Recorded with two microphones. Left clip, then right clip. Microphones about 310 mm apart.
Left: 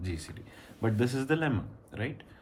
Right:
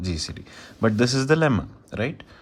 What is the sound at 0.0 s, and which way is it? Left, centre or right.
Speech, centre.